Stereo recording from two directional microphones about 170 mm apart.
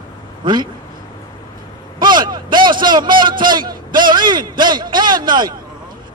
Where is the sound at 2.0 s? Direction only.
25° right (ahead or behind).